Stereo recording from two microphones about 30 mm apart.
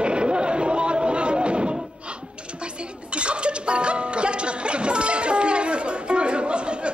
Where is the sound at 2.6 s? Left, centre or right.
Right.